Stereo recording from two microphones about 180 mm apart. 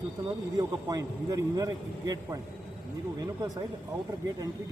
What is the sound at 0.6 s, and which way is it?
A man's voice, 20° right (ahead or behind).